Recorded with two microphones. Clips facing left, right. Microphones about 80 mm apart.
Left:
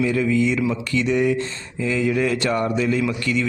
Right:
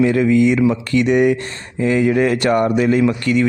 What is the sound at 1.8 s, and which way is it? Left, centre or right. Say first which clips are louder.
A man's voice: right 6 dB; right.